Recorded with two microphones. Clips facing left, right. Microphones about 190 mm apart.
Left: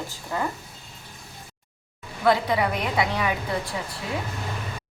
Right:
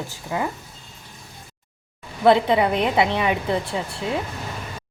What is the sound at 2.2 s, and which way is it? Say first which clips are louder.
A woman's voice: right 5 dB; 25° right (ahead or behind).